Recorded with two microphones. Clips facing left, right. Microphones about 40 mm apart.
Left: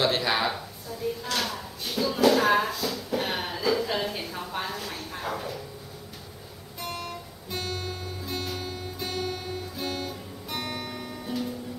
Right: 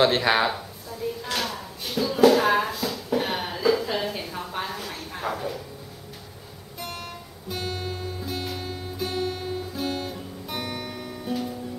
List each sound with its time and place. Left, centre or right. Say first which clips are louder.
0.0 s speech: right 5 dB; right
0.5 s a sound: right 2 dB; centre
6.8 s guitar: left 1 dB; centre